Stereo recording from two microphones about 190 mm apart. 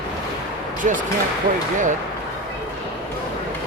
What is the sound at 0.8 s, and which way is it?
Speech, 40° right (ahead or behind).